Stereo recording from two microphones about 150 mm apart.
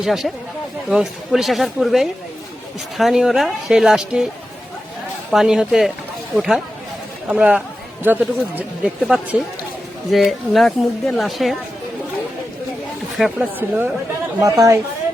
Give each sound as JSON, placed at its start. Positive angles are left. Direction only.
{"t": 0.0, "sound": "speech", "side_deg": 0}
{"t": 5.3, "sound": "speech", "side_deg": -5}
{"t": 13.1, "sound": "speech", "side_deg": 0}
{"t": 13.6, "sound": "speech", "side_deg": -10}
{"t": 14.4, "sound": "a woman's voice", "side_deg": -20}